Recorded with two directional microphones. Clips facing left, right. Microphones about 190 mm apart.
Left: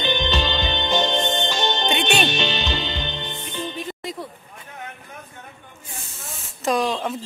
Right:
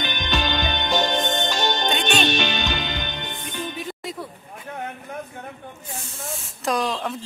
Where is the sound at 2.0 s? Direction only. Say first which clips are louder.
Left 1 dB; 10° left (ahead or behind).